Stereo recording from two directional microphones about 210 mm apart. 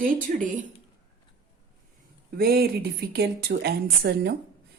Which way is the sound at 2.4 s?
45° right (ahead or behind).